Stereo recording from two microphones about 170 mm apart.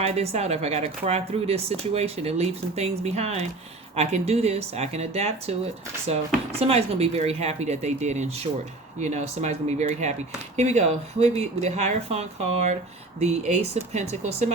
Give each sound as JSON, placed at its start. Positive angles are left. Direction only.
{"t": 0.0, "sound": "speech", "side_deg": -40}